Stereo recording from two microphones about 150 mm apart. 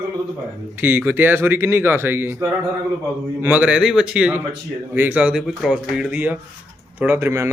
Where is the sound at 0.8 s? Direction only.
10° right (ahead or behind).